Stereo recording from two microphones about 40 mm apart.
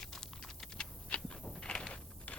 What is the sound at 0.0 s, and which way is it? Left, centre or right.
Typing, centre.